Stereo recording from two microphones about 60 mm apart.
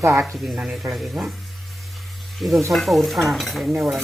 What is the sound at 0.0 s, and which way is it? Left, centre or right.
Stir, right.